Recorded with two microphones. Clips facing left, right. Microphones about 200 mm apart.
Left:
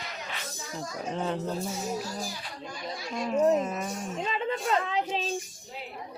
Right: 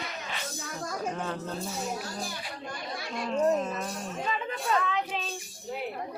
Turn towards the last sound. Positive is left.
turn(degrees=30)  # may be behind; listen again after turning